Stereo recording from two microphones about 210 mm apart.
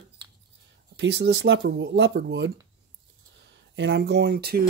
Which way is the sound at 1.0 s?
55° right (ahead or behind).